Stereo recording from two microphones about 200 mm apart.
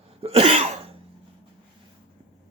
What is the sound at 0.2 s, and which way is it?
Cough, 30° right (ahead or behind).